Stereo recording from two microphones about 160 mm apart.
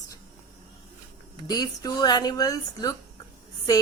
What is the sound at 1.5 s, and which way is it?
A woman's voice, 25° left (ahead or behind).